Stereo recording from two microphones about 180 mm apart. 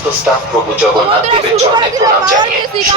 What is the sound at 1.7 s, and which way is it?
Speech, 25° right (ahead or behind).